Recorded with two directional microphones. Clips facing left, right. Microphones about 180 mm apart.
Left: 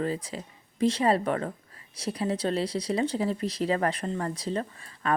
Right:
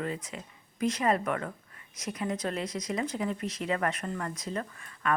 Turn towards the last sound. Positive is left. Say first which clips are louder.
# left 2 dB
turn(degrees=30)  # may be behind; listen again after turning